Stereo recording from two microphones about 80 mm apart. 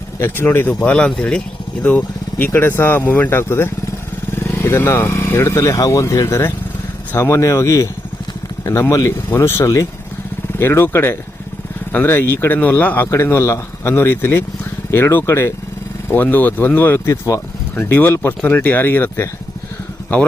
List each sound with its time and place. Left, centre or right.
0.2 s speech: left
2.5 s speech: left
9.3 s speech: left
13.1 s speech: left